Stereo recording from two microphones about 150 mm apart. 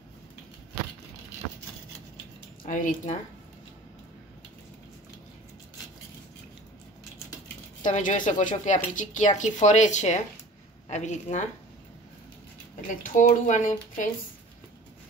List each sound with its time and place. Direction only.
2.6 s speech: 60° left (ahead or behind)
7.8 s speech: 55° left (ahead or behind)
12.8 s speech: 60° left (ahead or behind)